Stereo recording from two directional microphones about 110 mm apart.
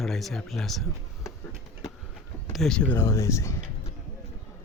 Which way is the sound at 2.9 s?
25° left (ahead or behind).